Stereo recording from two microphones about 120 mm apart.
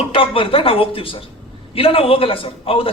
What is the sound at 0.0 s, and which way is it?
A man's voice, 50° left (ahead or behind).